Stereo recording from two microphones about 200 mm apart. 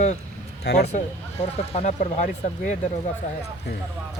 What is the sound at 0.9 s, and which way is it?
Speech, 30° left (ahead or behind).